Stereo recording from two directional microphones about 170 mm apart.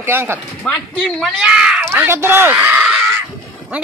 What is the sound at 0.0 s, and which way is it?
Speech, 10° right (ahead or behind).